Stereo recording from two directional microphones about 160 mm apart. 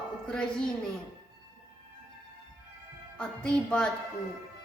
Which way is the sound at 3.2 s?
5° left (ahead or behind).